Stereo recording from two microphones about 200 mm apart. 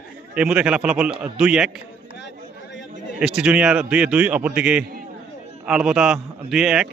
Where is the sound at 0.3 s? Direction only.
5° right (ahead or behind).